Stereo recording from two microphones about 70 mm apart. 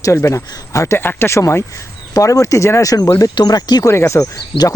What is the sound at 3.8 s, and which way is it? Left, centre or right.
Speech, left.